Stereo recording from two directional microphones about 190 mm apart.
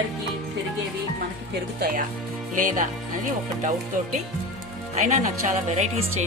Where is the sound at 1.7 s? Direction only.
50° right (ahead or behind).